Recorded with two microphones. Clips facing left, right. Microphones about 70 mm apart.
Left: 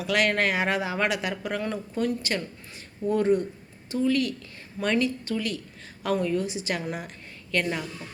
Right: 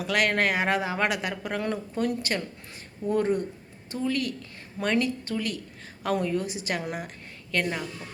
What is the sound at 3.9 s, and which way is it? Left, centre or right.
A woman's voice, right.